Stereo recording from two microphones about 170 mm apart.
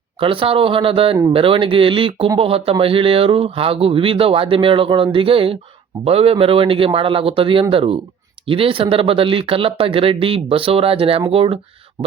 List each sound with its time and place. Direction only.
0.2 s speech: 30° right (ahead or behind)